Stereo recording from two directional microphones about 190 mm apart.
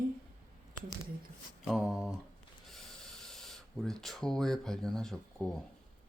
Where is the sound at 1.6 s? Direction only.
5° right (ahead or behind).